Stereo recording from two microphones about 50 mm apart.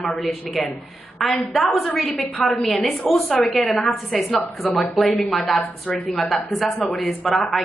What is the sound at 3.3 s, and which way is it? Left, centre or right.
A woman's voice, centre.